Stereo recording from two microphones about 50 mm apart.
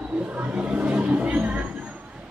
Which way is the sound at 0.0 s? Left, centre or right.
Right.